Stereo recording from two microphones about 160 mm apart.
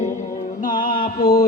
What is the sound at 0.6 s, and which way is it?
Mantra, 60° left (ahead or behind).